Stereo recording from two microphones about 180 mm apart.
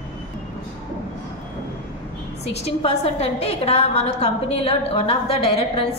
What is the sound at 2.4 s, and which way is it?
A woman's voice, 35° left (ahead or behind).